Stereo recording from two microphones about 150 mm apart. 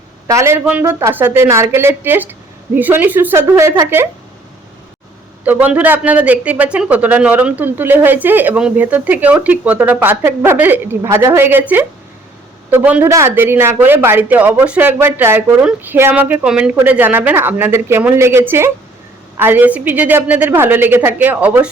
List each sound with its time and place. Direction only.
0.3 s a man's voice: 20° right (ahead or behind)
5.5 s a man's voice: 10° right (ahead or behind)